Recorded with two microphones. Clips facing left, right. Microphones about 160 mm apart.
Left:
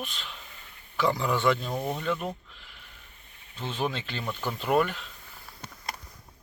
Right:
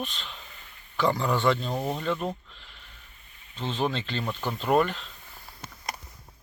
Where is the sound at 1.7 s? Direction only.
5° right (ahead or behind).